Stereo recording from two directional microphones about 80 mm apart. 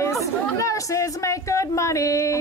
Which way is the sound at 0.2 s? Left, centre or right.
Left.